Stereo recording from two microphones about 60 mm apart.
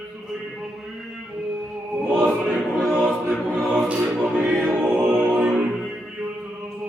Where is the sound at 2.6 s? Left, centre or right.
Centre.